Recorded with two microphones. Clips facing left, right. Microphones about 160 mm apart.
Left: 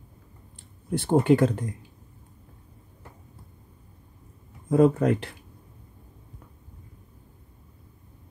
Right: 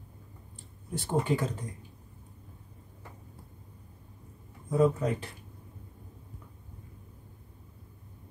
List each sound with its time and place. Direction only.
0.8 s speech: 65° left (ahead or behind)
4.6 s speech: 75° left (ahead or behind)